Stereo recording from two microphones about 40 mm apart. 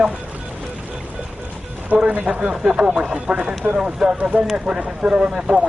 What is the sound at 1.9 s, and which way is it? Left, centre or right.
Speech, right.